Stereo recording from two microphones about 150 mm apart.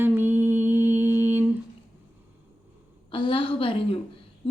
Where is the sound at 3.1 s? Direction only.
35° left (ahead or behind).